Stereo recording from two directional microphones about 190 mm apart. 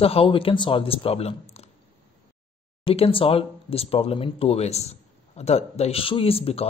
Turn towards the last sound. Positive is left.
turn(degrees=30)  # may be behind; listen again after turning